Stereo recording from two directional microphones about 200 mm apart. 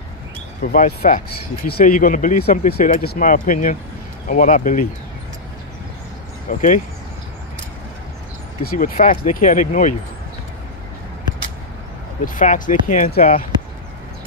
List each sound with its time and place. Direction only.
0.6 s speech: 45° left (ahead or behind)
6.5 s speech: 40° left (ahead or behind)
8.6 s speech: 45° left (ahead or behind)
12.4 s speech: 40° left (ahead or behind)